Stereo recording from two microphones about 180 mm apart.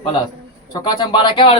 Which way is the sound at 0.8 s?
25° left (ahead or behind).